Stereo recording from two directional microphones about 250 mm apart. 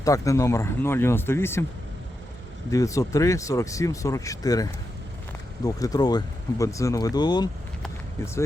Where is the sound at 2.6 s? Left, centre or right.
Centre.